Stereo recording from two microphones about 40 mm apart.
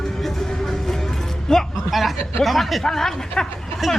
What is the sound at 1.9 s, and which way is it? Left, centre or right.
Speech, centre.